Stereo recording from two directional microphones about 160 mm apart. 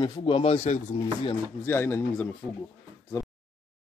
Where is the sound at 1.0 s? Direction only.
30° left (ahead or behind).